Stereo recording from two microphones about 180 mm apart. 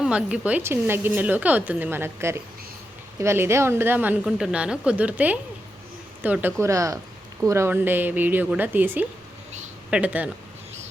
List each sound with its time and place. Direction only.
0.0 s a woman's voice: 5° right (ahead or behind)